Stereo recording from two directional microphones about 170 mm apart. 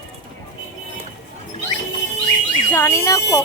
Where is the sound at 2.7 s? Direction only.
15° left (ahead or behind).